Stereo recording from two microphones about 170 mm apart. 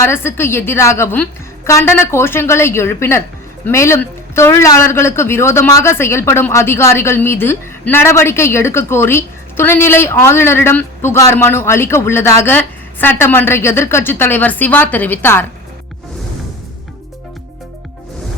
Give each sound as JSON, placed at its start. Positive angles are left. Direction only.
{"t": 0.0, "sound": "a woman's voice", "side_deg": 15}